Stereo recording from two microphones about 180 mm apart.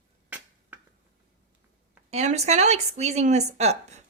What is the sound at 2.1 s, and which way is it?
Speech, 35° right (ahead or behind).